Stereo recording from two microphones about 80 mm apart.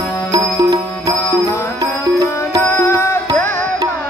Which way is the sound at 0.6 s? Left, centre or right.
Right.